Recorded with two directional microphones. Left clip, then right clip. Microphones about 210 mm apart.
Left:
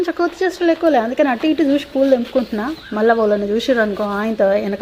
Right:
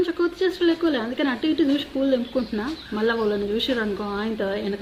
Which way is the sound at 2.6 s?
25° left (ahead or behind).